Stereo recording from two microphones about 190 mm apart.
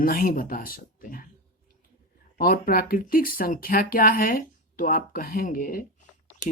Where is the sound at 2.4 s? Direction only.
50° left (ahead or behind).